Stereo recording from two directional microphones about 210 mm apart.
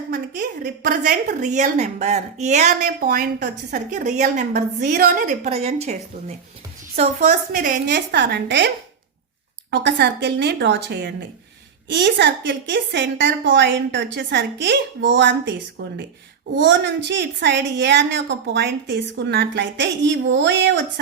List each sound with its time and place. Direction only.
0.1 s a woman's voice: 45° right (ahead or behind)